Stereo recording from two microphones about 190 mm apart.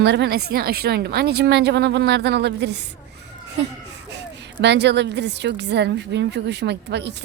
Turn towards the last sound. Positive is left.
turn(degrees=-65)  # may be behind; listen again after turning